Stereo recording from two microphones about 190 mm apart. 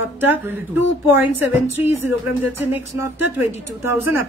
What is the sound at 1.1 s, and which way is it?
A woman's voice, 10° right (ahead or behind).